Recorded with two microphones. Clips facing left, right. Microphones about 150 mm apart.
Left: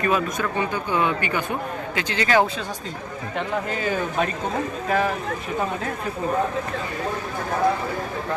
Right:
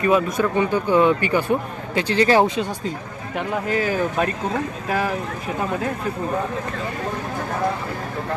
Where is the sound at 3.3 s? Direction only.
5° right (ahead or behind).